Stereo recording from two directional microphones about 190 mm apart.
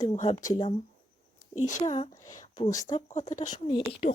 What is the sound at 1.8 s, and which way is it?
Speech, 30° left (ahead or behind).